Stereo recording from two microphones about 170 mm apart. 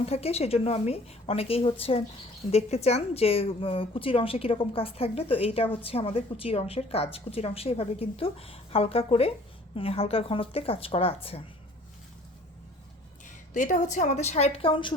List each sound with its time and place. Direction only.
0.0 s speech: 35° left (ahead or behind)
13.2 s a woman's voice: 50° left (ahead or behind); by 14.9 s 30° left (ahead or behind)